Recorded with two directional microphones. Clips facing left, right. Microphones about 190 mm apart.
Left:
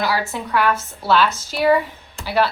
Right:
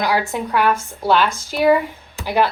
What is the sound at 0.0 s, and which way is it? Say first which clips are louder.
A woman's voice: right 2 dB; 15° right (ahead or behind).